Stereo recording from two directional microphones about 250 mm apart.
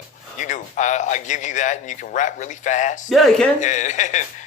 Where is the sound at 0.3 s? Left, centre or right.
Left.